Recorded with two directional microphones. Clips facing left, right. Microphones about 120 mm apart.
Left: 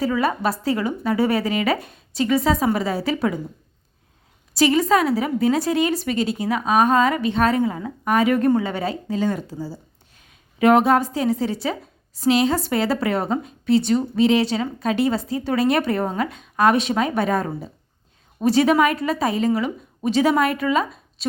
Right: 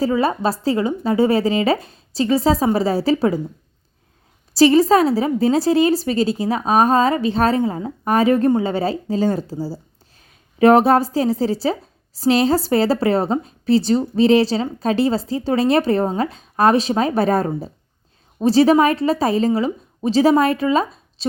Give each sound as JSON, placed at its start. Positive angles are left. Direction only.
{"t": 0.0, "sound": "a woman's voice", "side_deg": -30}
{"t": 4.5, "sound": "a woman's voice", "side_deg": -35}